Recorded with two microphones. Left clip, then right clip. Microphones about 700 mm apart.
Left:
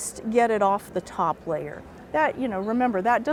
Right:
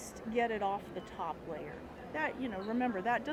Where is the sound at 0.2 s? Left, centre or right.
Left.